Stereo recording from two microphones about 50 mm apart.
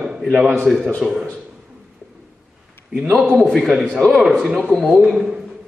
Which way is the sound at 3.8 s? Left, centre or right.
Centre.